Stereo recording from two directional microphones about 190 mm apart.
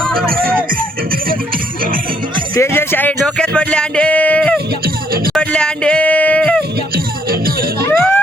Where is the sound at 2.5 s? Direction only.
15° left (ahead or behind).